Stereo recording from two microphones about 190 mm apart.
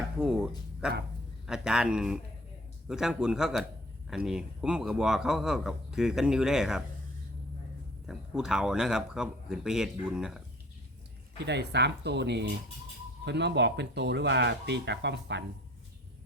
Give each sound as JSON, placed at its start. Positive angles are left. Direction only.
{"t": 0.2, "sound": "a sound", "side_deg": -5}
{"t": 1.5, "sound": "speech", "side_deg": -5}
{"t": 8.0, "sound": "speech", "side_deg": -5}
{"t": 11.4, "sound": "speech", "side_deg": -65}